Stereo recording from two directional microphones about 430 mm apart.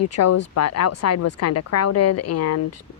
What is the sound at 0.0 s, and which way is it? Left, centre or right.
Speech, left.